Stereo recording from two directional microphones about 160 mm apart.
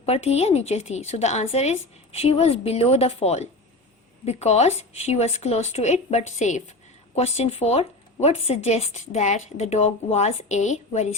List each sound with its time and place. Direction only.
0.0 s a woman's voice: 40° left (ahead or behind)